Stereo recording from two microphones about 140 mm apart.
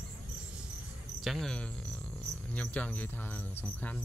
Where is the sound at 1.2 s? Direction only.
Centre (ahead or behind).